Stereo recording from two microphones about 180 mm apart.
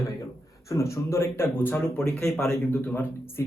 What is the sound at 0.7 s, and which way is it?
Speech, 15° left (ahead or behind).